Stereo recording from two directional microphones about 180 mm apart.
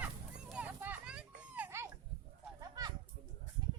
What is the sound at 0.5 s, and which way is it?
Children playing, 10° right (ahead or behind).